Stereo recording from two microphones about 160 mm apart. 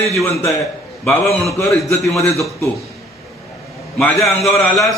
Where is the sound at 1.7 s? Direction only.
Centre (ahead or behind).